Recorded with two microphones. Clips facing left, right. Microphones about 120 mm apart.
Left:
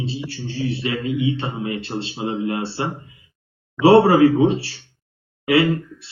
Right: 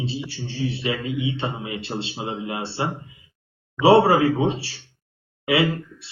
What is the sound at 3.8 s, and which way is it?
Speech, 25° right (ahead or behind).